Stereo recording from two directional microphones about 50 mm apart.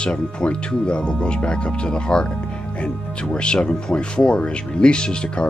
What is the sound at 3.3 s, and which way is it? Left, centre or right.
Speech, centre.